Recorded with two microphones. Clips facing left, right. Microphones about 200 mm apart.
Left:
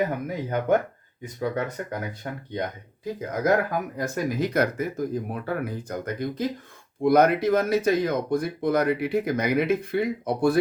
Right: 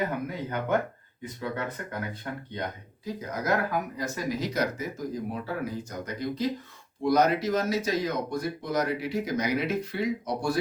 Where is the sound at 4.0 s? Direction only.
55° left (ahead or behind).